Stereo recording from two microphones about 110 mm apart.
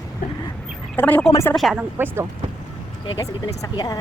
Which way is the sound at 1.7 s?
20° right (ahead or behind).